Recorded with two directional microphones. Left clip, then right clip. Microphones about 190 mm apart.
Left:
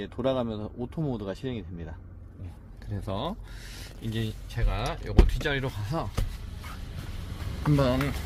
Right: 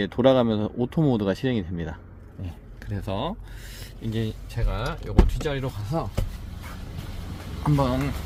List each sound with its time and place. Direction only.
0.0 s speech: 50° right (ahead or behind)
2.9 s speech: 10° right (ahead or behind)
4.5 s speech: centre (ahead or behind)
7.6 s speech: 5° right (ahead or behind)